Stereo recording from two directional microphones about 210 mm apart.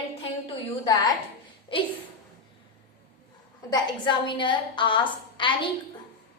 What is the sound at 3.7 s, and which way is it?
A woman's voice, 20° left (ahead or behind).